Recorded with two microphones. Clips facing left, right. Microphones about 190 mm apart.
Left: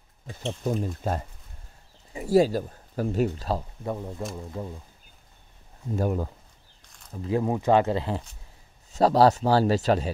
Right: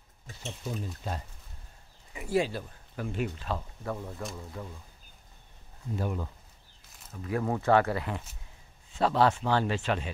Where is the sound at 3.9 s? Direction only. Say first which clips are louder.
Left 4 dB; 20° left (ahead or behind).